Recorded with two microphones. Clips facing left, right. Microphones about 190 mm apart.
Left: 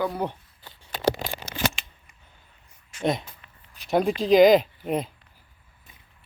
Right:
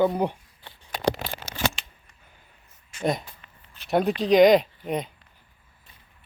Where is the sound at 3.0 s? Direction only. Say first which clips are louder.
Left 1 dB; centre (ahead or behind).